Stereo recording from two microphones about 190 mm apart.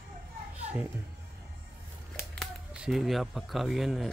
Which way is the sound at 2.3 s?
Centre (ahead or behind).